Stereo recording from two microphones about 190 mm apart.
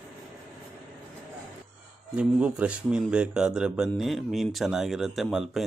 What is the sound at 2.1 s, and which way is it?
Speech, 5° right (ahead or behind).